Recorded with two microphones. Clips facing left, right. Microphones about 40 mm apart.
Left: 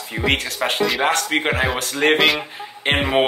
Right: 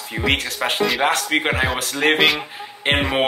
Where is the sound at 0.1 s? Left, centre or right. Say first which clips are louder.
Even; centre.